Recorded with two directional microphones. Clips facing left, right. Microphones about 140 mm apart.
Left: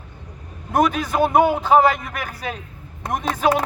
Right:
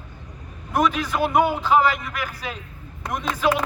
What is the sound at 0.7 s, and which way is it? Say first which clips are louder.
A man's voice: left 3 dB; 45° left (ahead or behind).